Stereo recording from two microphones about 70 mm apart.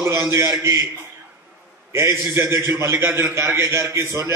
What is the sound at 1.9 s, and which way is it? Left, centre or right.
A man's voice, right.